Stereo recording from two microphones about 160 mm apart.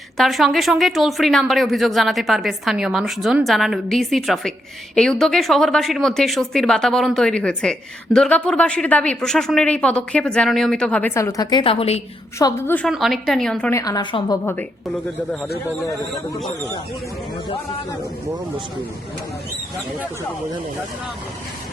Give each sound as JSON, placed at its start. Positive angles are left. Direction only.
{"t": 0.2, "sound": "a woman's voice", "side_deg": 0}
{"t": 11.6, "sound": "a woman's voice", "side_deg": 35}
{"t": 12.4, "sound": "a woman's voice", "side_deg": 20}
{"t": 12.9, "sound": "a woman's voice", "side_deg": 0}
{"t": 13.7, "sound": "a woman's voice", "side_deg": 20}